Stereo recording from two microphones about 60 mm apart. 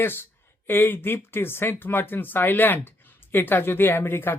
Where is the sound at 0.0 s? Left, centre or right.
Left.